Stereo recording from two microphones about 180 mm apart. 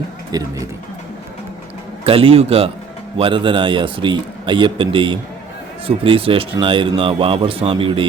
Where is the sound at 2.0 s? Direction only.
30° right (ahead or behind).